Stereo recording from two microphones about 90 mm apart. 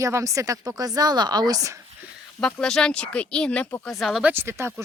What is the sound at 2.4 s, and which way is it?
Speech, 10° left (ahead or behind).